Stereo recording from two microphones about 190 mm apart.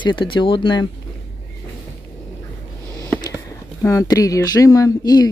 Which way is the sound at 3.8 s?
15° left (ahead or behind).